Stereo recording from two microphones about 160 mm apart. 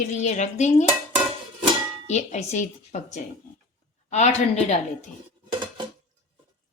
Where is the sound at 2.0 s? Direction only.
45° left (ahead or behind).